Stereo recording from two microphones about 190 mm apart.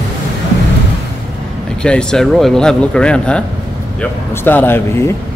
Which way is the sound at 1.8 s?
5° left (ahead or behind).